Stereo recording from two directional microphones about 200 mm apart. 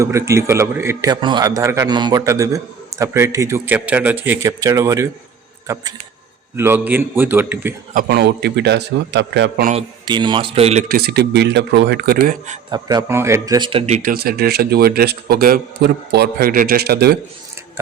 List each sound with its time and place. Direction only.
0.0 s a man's voice: 15° right (ahead or behind)
7.9 s a man's voice: 50° right (ahead or behind)
10.1 s a man's voice: 25° right (ahead or behind)
10.8 s a man's voice: 50° right (ahead or behind)
12.7 s a man's voice: 20° right (ahead or behind); by 14.1 s 35° right (ahead or behind)
14.1 s a man's voice: 50° right (ahead or behind)